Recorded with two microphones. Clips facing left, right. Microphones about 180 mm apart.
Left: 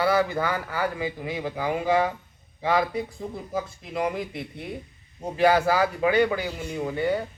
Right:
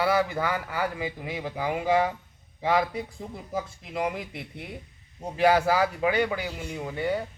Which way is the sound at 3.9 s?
20° right (ahead or behind).